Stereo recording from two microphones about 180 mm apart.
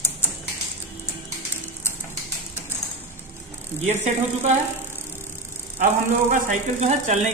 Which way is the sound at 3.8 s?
35° right (ahead or behind).